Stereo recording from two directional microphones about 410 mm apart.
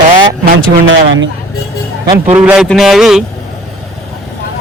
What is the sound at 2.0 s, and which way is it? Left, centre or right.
A man's voice, centre.